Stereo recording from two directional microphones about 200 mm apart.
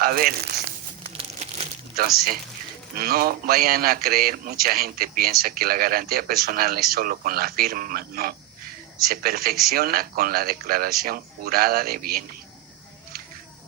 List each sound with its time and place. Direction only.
0.0 s a man's voice: 45° right (ahead or behind)
2.0 s a man's voice: 50° right (ahead or behind)